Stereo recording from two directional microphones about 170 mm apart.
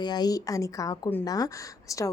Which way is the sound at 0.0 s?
25° left (ahead or behind).